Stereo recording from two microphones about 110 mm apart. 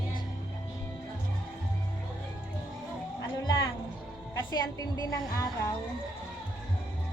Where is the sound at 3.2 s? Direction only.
35° left (ahead or behind).